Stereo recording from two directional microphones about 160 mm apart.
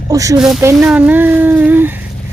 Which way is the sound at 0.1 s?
20° right (ahead or behind).